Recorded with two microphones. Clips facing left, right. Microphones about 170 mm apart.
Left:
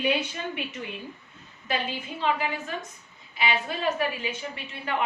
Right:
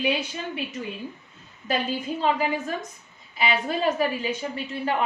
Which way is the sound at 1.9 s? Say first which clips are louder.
Right 4 dB; 40° right (ahead or behind).